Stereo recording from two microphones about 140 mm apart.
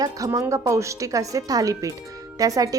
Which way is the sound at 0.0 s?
25° right (ahead or behind).